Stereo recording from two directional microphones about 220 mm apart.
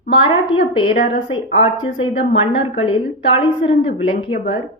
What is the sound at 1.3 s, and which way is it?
A woman's voice, 25° left (ahead or behind).